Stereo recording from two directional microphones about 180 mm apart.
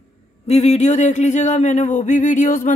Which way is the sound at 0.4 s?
35° left (ahead or behind).